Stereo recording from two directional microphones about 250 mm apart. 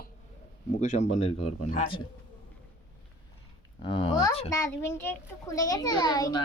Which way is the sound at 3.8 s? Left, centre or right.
Left.